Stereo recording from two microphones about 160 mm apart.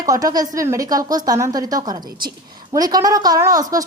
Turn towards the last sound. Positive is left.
turn(degrees=-20)  # may be behind; listen again after turning